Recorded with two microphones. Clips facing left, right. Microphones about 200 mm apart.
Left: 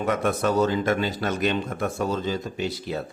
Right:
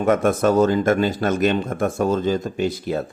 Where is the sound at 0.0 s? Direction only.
50° right (ahead or behind).